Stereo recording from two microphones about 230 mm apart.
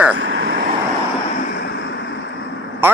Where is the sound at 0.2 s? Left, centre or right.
Right.